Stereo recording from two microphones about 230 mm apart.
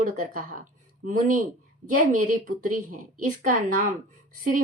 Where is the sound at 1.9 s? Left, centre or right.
Right.